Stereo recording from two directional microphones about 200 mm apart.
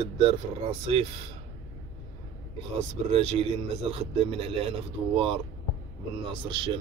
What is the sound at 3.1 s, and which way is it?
A man's voice, 30° right (ahead or behind).